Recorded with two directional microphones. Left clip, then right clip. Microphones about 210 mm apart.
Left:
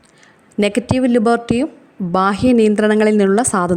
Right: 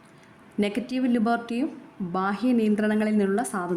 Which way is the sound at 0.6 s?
40° left (ahead or behind).